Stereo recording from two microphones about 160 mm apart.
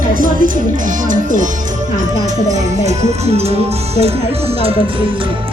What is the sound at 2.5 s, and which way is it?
Speech, 45° right (ahead or behind).